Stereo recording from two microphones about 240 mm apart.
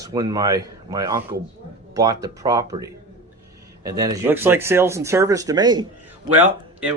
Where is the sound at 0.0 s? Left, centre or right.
Centre.